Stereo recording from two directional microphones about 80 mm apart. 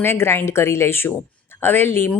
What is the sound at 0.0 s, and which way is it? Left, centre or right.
A woman's voice, left.